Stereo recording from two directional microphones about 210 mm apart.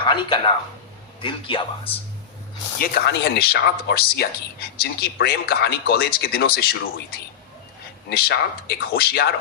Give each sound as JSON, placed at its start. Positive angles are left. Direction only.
{"t": 0.0, "sound": "speech", "side_deg": 25}
{"t": 2.8, "sound": "speech", "side_deg": 50}
{"t": 8.1, "sound": "speech", "side_deg": 50}